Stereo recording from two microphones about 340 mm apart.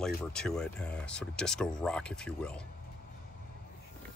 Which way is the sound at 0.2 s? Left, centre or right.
Centre.